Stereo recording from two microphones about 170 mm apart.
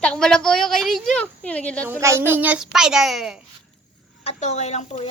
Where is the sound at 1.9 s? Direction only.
15° right (ahead or behind).